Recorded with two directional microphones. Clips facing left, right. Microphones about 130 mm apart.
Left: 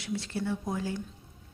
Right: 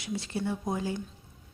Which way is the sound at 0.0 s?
15° right (ahead or behind).